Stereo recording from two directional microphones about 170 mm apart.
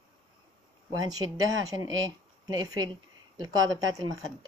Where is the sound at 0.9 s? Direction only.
20° right (ahead or behind).